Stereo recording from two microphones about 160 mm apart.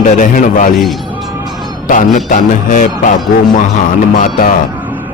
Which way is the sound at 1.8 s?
55° left (ahead or behind).